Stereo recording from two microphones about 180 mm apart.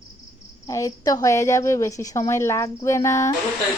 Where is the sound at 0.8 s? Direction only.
20° left (ahead or behind).